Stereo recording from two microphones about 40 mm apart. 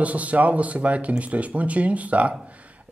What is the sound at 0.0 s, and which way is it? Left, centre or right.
Speech, right.